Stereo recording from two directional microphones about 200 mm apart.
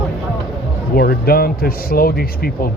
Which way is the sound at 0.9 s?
50° left (ahead or behind).